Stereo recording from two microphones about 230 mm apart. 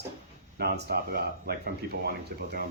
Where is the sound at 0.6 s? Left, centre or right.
Right.